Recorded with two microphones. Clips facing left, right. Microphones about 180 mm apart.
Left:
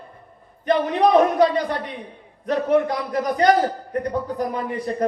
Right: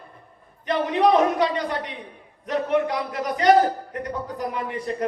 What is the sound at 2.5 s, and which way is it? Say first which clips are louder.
A man's voice: left 3 dB; 40° left (ahead or behind).